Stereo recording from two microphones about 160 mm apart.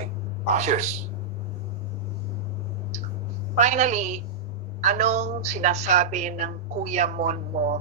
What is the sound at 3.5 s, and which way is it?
A man's voice, 50° right (ahead or behind).